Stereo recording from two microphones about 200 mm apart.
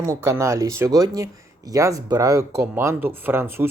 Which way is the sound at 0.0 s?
15° right (ahead or behind).